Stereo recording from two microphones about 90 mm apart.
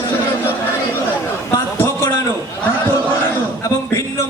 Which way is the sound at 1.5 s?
30° left (ahead or behind).